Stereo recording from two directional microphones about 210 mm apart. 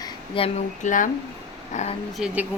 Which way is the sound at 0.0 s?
25° left (ahead or behind).